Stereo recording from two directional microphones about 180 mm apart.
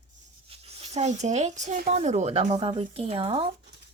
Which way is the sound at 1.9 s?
35° right (ahead or behind).